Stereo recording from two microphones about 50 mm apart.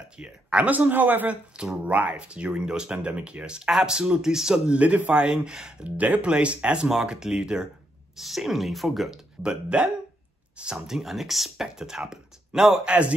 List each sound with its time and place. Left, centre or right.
0.2 s speech: centre
0.7 s speech: right; by 4.7 s centre
4.7 s speech: right
5.3 s speech: centre
5.9 s speech: right; by 7.6 s centre
8.2 s speech: centre
9.4 s speech: centre
11.0 s speech: centre